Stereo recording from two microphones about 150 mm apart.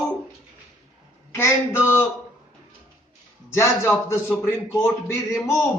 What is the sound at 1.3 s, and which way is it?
Speech, 15° left (ahead or behind).